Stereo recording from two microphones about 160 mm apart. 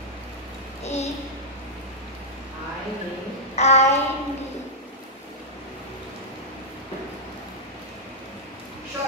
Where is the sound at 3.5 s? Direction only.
45° left (ahead or behind).